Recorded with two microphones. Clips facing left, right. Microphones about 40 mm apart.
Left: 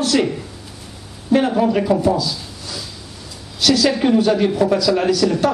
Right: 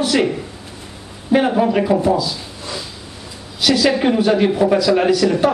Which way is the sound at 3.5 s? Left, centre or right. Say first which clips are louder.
Right 1 dB; centre.